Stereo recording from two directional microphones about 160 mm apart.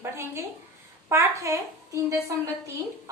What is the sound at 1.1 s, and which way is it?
A woman's voice, 20° right (ahead or behind).